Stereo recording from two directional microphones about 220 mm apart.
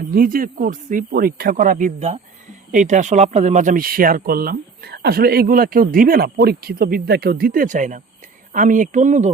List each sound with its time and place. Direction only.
0.0 s speech: 40° right (ahead or behind)